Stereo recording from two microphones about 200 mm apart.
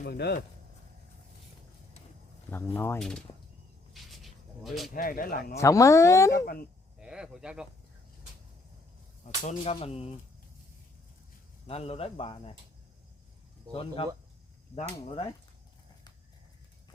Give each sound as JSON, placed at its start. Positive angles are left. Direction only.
{"t": 0.0, "sound": "speech", "side_deg": 50}
{"t": 2.5, "sound": "speech", "side_deg": 10}
{"t": 3.9, "sound": "a sound", "side_deg": 0}
{"t": 4.9, "sound": "speech", "side_deg": 45}
{"t": 5.5, "sound": "speech", "side_deg": 15}
{"t": 6.3, "sound": "speech", "side_deg": 45}
{"t": 7.0, "sound": "speech", "side_deg": -5}
{"t": 9.4, "sound": "speech", "side_deg": 35}
{"t": 11.6, "sound": "speech", "side_deg": 30}
{"t": 13.7, "sound": "speech", "side_deg": 25}